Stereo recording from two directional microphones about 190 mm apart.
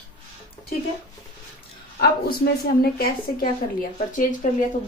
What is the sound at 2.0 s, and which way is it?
Speech, 55° left (ahead or behind).